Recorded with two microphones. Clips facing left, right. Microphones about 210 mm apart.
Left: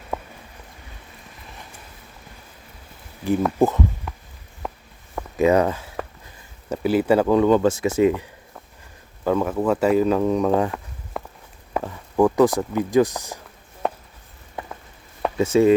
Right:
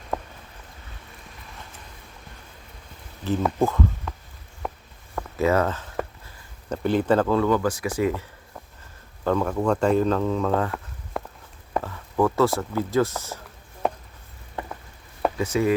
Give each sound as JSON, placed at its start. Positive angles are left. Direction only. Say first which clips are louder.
{"t": 0.1, "sound": "a sound", "louder": "even", "side_deg": 5}
{"t": 3.2, "sound": "speech", "louder": "left 4 dB", "side_deg": 10}
{"t": 3.6, "sound": "speech", "louder": "left 4 dB", "side_deg": 20}
{"t": 4.6, "sound": "walk", "louder": "even", "side_deg": 0}
{"t": 5.1, "sound": "a sound", "louder": "left 4 dB", "side_deg": 15}
{"t": 6.7, "sound": "speech", "louder": "left 3 dB", "side_deg": 10}
{"t": 9.2, "sound": "speech", "louder": "left 2 dB", "side_deg": 5}
{"t": 11.1, "sound": "walk", "louder": "even", "side_deg": 0}
{"t": 11.7, "sound": "speech", "louder": "left 2 dB", "side_deg": 15}
{"t": 13.8, "sound": "a sound", "louder": "even", "side_deg": 0}
{"t": 15.4, "sound": "chopping", "louder": "left 8 dB", "side_deg": 25}